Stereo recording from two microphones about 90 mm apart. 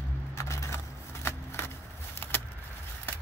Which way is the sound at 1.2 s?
25° left (ahead or behind).